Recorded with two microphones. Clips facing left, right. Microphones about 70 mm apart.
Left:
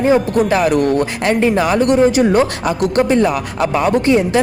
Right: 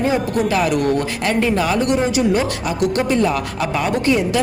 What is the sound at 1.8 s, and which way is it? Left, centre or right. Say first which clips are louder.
Speech: left 5 dB; left.